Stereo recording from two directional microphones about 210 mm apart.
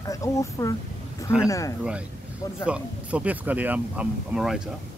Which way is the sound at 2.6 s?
5° right (ahead or behind).